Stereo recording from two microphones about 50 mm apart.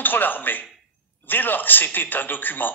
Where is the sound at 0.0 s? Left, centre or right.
Left.